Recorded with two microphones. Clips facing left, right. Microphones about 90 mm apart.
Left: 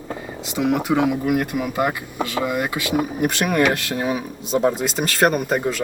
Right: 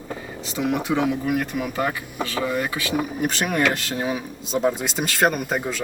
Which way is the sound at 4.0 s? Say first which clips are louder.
Left 3 dB; 5° left (ahead or behind).